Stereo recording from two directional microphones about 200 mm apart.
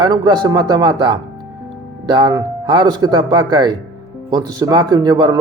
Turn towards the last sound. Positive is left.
turn(degrees=-20)  # may be behind; listen again after turning